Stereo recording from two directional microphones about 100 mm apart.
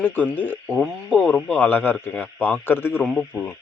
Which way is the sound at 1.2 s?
5° left (ahead or behind).